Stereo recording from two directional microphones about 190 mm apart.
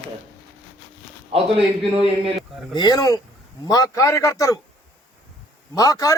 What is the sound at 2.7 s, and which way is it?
A man's voice, 20° left (ahead or behind).